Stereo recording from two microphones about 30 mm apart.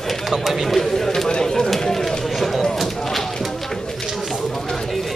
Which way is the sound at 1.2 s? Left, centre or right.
Left.